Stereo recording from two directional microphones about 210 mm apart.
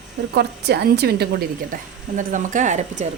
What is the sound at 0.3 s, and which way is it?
A woman's voice, 50° right (ahead or behind).